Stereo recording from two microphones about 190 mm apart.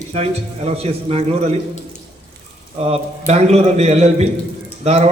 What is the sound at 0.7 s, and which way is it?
Speech, 30° right (ahead or behind).